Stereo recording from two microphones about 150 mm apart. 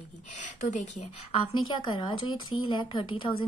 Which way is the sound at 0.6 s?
60° left (ahead or behind).